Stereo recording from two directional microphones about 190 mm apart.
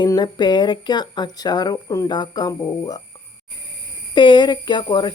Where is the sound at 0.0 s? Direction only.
20° left (ahead or behind).